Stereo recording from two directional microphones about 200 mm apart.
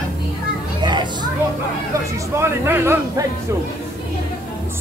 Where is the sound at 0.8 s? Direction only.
20° right (ahead or behind).